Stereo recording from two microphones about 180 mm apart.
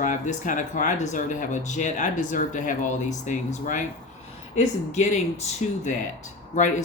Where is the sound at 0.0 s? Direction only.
45° left (ahead or behind).